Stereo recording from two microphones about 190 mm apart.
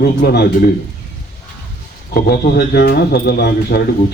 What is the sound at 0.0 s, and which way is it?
Speech, 55° left (ahead or behind).